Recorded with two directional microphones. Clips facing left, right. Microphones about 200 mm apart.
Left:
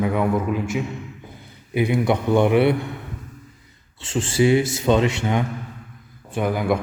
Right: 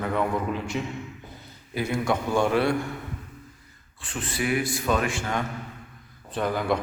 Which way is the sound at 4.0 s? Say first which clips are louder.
Left 10 dB; 25° left (ahead or behind).